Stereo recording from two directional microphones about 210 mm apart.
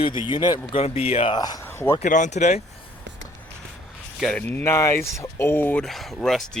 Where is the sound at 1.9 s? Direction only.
35° left (ahead or behind).